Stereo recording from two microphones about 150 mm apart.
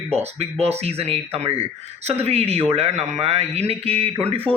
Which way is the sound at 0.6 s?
45° right (ahead or behind).